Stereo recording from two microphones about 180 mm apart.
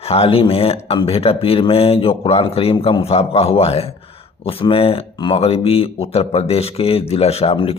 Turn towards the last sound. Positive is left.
turn(degrees=30)  # may be behind; listen again after turning